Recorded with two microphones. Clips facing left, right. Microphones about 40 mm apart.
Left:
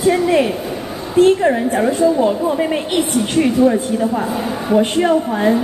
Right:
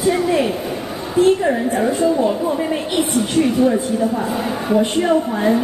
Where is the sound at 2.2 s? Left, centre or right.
Left.